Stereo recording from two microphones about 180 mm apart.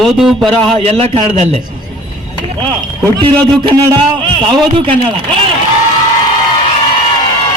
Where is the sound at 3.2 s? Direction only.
25° right (ahead or behind).